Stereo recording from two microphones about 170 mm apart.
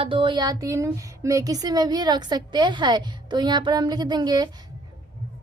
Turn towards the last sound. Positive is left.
turn(degrees=-25)  # may be behind; listen again after turning